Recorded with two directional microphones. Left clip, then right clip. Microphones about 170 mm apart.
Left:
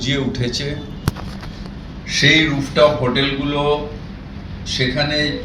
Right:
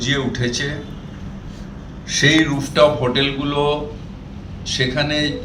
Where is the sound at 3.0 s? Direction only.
5° right (ahead or behind).